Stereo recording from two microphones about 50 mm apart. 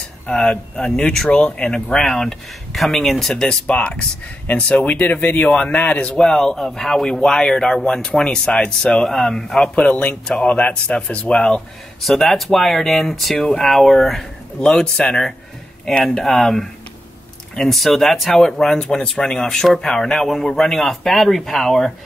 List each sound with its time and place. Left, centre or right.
0.3 s speech: centre
2.0 s a man's voice: centre
3.6 s speech: left
6.1 s speech: centre
9.6 s speech: left
12.0 s a man's voice: centre